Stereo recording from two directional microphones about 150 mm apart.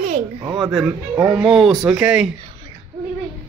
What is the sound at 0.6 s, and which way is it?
A man's voice, 5° right (ahead or behind).